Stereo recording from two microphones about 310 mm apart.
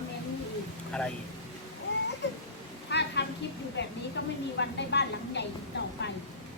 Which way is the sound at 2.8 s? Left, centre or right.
Left.